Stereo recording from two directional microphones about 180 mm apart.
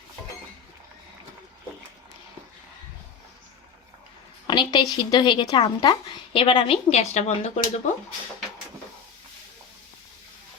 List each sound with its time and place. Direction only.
4.4 s a woman's voice: 25° left (ahead or behind)